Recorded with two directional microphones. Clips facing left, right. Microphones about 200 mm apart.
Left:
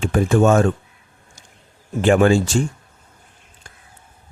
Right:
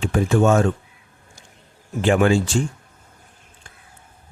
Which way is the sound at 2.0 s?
45° left (ahead or behind).